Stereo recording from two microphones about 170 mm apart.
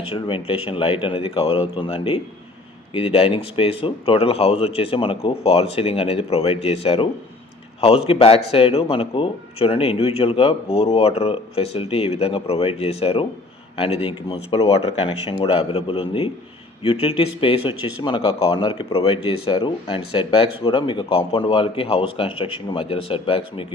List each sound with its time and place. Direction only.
0.1 s speech: 30° left (ahead or behind)